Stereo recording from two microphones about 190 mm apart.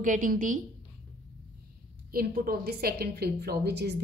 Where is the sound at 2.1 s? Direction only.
50° right (ahead or behind).